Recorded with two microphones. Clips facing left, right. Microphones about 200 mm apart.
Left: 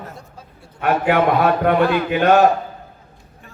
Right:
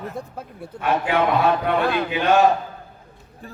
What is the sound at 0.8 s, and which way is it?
A man's voice, 60° left (ahead or behind).